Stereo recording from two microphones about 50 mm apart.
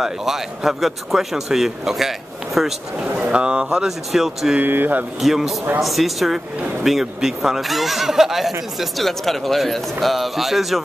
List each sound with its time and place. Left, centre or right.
0.0 s a man's voice: centre
3.2 s speech: right
3.8 s speech: centre
4.6 s speech: right
5.2 s speech: centre